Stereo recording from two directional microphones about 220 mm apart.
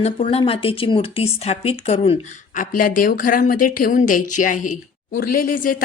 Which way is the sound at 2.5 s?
40° left (ahead or behind).